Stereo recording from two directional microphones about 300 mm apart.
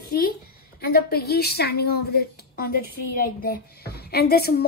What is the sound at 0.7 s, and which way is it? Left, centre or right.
Speech, left.